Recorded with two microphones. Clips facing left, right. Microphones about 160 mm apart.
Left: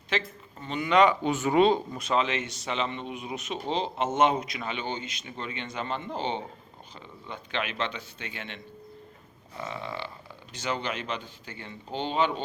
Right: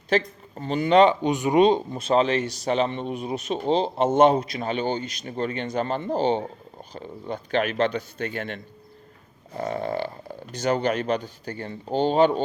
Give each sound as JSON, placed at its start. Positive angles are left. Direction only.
{"t": 0.1, "sound": "speech", "side_deg": -40}
{"t": 1.2, "sound": "speech", "side_deg": -15}